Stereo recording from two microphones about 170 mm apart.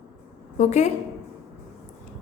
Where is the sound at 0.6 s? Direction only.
40° left (ahead or behind).